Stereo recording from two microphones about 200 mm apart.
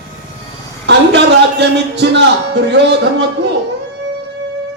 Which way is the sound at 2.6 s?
60° right (ahead or behind).